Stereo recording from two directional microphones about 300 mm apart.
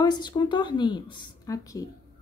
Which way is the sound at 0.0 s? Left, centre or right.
Centre.